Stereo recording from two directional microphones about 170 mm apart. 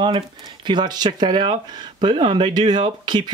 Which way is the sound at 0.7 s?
25° right (ahead or behind).